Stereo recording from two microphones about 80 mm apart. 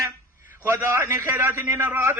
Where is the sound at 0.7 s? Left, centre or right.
Right.